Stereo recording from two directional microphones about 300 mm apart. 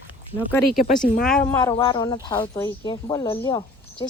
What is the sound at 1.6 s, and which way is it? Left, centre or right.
Speech, centre.